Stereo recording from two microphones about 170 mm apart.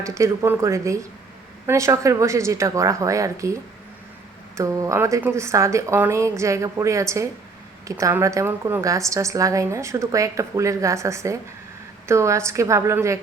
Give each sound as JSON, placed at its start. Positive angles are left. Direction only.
{"t": 0.0, "sound": "a woman's voice", "side_deg": -15}